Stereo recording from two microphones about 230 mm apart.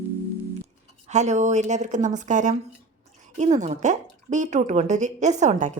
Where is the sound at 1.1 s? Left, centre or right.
Right.